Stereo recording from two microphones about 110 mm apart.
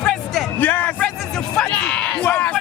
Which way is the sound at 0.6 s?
15° left (ahead or behind).